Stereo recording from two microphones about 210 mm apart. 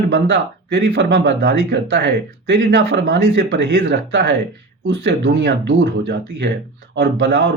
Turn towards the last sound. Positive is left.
turn(degrees=-55)  # may be behind; listen again after turning